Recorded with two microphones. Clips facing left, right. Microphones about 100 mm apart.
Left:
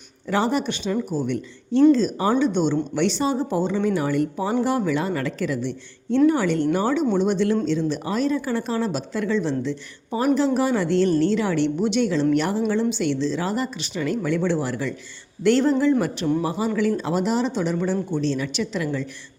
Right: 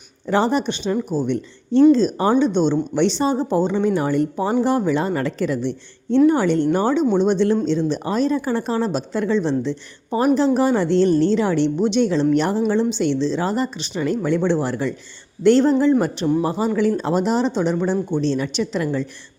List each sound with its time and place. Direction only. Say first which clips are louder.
0.3 s a woman's voice: right 3 dB; 30° right (ahead or behind)